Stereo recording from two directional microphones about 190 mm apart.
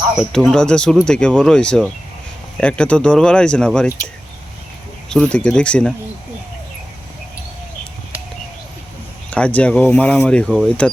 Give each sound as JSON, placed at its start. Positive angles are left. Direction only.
{"t": 0.2, "sound": "speech", "side_deg": 0}
{"t": 5.0, "sound": "speech", "side_deg": 5}
{"t": 9.3, "sound": "speech", "side_deg": 5}